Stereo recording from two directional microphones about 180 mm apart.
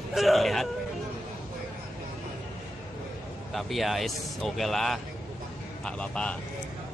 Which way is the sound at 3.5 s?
Centre (ahead or behind).